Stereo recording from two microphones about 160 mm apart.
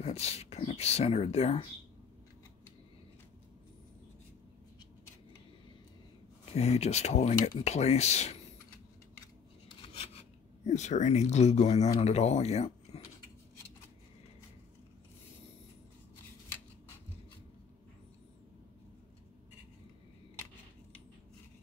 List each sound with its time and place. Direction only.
0.0 s speech: 40° left (ahead or behind)
6.5 s speech: 40° left (ahead or behind)
9.7 s a sound: 35° left (ahead or behind)
10.6 s speech: 45° left (ahead or behind)